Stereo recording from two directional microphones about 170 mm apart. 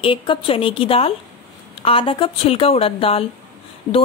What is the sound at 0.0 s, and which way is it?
A woman's voice, 30° left (ahead or behind).